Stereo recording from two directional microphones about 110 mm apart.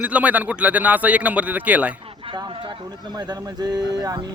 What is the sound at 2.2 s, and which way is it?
Speech, 50° right (ahead or behind).